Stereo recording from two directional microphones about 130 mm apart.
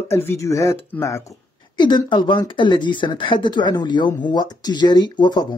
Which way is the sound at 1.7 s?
35° left (ahead or behind).